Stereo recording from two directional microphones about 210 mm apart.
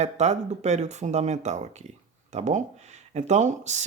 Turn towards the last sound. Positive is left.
turn(degrees=-35)  # may be behind; listen again after turning